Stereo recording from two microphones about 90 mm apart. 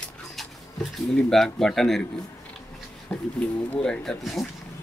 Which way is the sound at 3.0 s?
15° left (ahead or behind).